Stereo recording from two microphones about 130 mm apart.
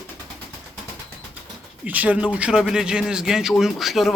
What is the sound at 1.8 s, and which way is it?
Speech, 10° right (ahead or behind).